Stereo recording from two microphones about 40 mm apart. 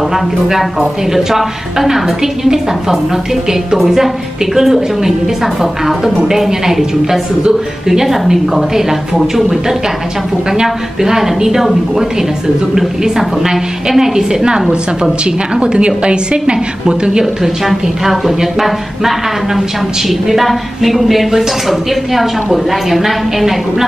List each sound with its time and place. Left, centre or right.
0.1 s a woman's voice: centre
10.5 s a woman's voice: centre